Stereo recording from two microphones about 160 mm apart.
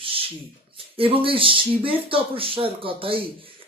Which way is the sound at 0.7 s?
35° right (ahead or behind).